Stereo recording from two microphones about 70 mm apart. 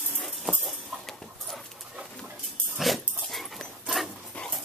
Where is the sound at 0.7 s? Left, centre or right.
Centre.